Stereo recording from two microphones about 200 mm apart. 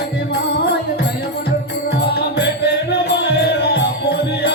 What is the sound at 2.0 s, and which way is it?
Music, 55° left (ahead or behind).